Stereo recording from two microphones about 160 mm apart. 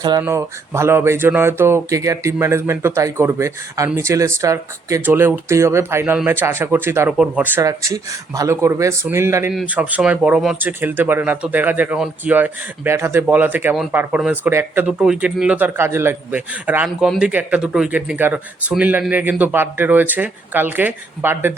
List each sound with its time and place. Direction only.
0.2 s speech: 15° right (ahead or behind)